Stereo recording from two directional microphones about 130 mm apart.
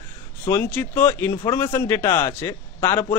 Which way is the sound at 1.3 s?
35° left (ahead or behind).